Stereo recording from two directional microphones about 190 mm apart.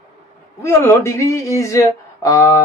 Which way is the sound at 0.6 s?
15° left (ahead or behind).